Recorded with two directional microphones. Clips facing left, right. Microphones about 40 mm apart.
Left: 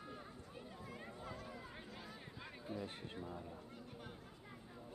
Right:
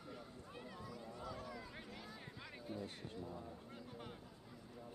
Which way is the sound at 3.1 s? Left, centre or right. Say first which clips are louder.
Even; left.